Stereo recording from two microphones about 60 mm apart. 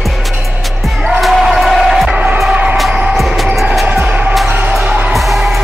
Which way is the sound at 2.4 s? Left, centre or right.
Centre.